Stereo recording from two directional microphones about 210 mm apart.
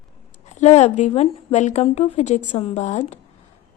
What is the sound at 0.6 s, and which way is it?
A woman's voice, 30° left (ahead or behind).